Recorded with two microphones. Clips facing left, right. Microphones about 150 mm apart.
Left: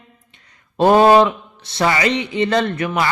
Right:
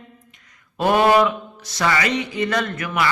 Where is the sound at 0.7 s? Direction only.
30° left (ahead or behind).